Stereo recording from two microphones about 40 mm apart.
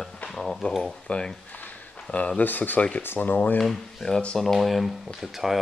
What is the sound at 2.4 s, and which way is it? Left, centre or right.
Speech, left.